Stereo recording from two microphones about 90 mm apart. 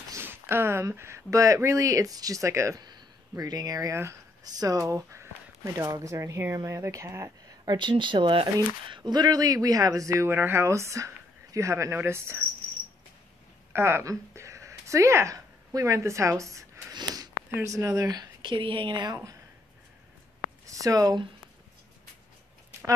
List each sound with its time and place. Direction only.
0.1 s speech: 25° right (ahead or behind)
2.8 s speech: 50° right (ahead or behind); by 7.5 s 30° right (ahead or behind)
7.6 s speech: 55° right (ahead or behind); by 8.5 s 70° right (ahead or behind)
8.8 s speech: 60° right (ahead or behind); by 12.4 s 25° right (ahead or behind)
13.7 s speech: 30° right (ahead or behind)
16.9 s sniff: 50° right (ahead or behind)
17.6 s speech: 40° right (ahead or behind)
18.5 s speech: 75° right (ahead or behind)
20.6 s speech: 40° right (ahead or behind)